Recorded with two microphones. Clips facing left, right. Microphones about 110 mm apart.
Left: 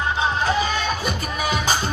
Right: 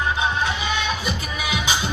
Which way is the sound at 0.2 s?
40° left (ahead or behind).